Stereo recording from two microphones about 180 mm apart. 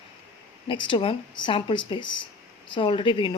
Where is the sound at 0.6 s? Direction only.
30° left (ahead or behind).